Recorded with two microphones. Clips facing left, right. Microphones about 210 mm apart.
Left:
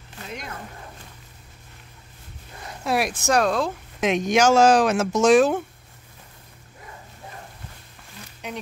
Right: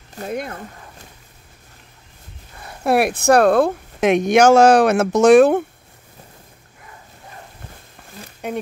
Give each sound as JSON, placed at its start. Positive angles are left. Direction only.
{"t": 0.1, "sound": "speech", "side_deg": -45}
{"t": 2.8, "sound": "speech", "side_deg": -60}
{"t": 8.1, "sound": "a sound", "side_deg": -50}